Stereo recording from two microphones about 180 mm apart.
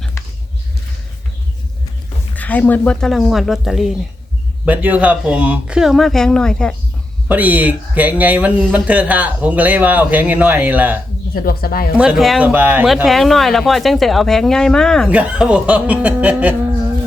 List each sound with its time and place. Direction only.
2.3 s speech: 10° left (ahead or behind)
7.3 s speech: 10° right (ahead or behind)
11.4 s speech: 55° left (ahead or behind)
11.9 s speech: 5° right (ahead or behind)